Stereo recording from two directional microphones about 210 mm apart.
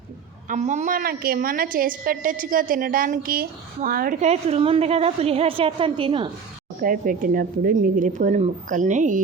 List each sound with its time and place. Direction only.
0.4 s a woman's voice: 35° right (ahead or behind)
4.3 s a woman's voice: 30° right (ahead or behind)
6.8 s a woman's voice: 40° right (ahead or behind)